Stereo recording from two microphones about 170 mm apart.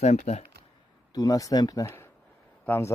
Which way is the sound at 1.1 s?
20° left (ahead or behind).